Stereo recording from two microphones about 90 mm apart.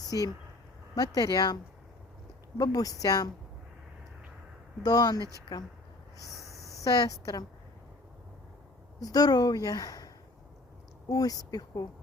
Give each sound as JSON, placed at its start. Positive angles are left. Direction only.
{"t": 0.9, "sound": "a woman's voice", "side_deg": 45}
{"t": 2.6, "sound": "a woman's voice", "side_deg": 40}
{"t": 4.8, "sound": "a woman's voice", "side_deg": 45}
{"t": 6.4, "sound": "a sound", "side_deg": 35}
{"t": 6.7, "sound": "a woman's voice", "side_deg": 40}
{"t": 9.0, "sound": "a woman's voice", "side_deg": 45}
{"t": 11.1, "sound": "a woman's voice", "side_deg": 40}